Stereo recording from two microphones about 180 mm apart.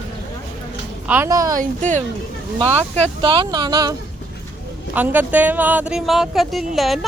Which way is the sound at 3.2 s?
30° right (ahead or behind).